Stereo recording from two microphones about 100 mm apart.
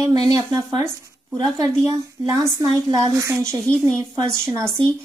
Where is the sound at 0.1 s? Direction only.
40° right (ahead or behind).